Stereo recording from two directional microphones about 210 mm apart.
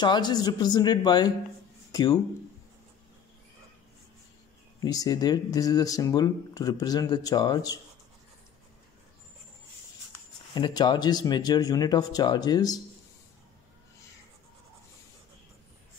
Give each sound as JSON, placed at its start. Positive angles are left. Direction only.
{"t": 0.0, "sound": "speech", "side_deg": 20}
{"t": 4.8, "sound": "speech", "side_deg": 15}
{"t": 10.5, "sound": "speech", "side_deg": 20}